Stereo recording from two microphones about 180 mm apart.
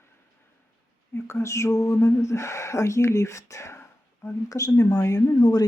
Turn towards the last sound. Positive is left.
turn(degrees=20)  # may be behind; listen again after turning